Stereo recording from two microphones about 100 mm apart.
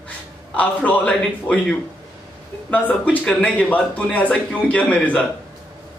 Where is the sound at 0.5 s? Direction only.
15° left (ahead or behind).